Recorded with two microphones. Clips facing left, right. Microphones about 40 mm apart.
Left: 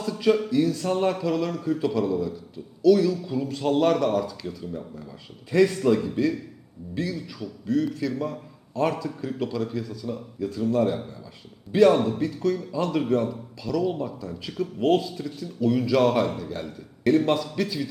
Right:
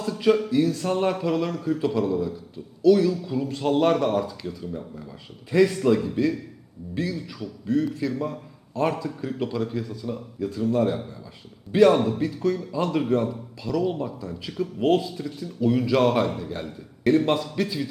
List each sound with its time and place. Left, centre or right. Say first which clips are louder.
0.0 s a sound: right 1 dB; centre
0.5 s speech: right 1 dB; right
0.8 s a man's voice: even; centre
1.6 s a man's voice: right 1 dB; centre
3.5 s speech: right 1 dB; centre
4.4 s speech: right 1 dB; centre
6.9 s a man's voice: right 1 dB; centre
10.1 s a man's voice: right 1 dB; centre